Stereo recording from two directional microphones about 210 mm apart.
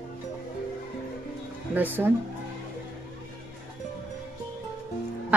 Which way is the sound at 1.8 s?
10° right (ahead or behind).